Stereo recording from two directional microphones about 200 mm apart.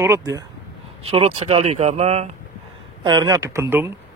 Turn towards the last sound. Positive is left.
turn(degrees=-10)  # may be behind; listen again after turning